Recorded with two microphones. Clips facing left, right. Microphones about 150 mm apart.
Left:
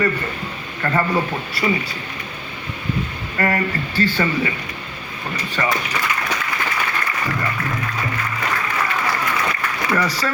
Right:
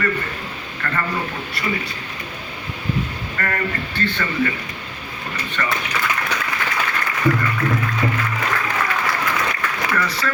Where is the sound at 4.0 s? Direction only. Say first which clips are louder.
Left 5 dB; 35° left (ahead or behind).